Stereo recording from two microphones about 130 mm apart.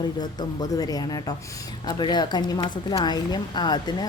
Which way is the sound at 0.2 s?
30° left (ahead or behind).